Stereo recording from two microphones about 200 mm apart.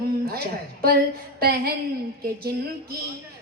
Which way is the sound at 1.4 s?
50° right (ahead or behind).